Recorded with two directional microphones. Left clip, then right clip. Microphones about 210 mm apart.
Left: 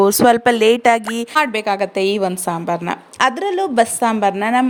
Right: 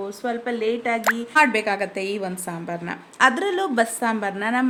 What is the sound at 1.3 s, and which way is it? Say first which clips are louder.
A woman's voice: left 3 dB; 30° left (ahead or behind).